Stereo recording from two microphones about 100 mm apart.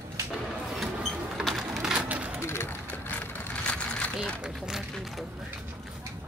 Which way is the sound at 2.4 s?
25° left (ahead or behind).